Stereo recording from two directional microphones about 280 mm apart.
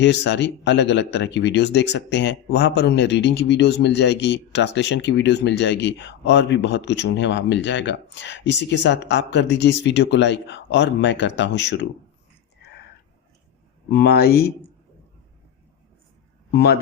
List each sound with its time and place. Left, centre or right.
0.0 s speech: left
13.9 s speech: left
16.5 s speech: left